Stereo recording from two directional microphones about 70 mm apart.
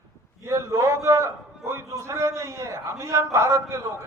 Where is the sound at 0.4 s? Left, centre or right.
Right.